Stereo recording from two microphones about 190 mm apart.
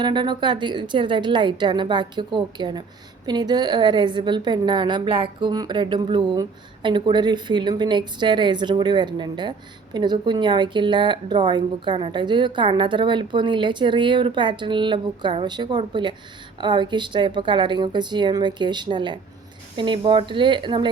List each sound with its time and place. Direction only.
0.0 s a woman's voice: 25° right (ahead or behind)